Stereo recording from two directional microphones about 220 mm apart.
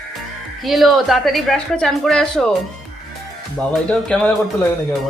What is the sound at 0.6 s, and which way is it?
Speech, centre (ahead or behind).